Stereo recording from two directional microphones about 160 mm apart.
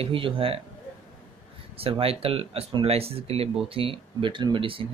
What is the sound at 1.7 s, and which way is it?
Speech, 35° right (ahead or behind).